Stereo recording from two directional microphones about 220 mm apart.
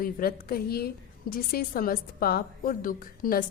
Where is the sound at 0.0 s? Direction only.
40° left (ahead or behind).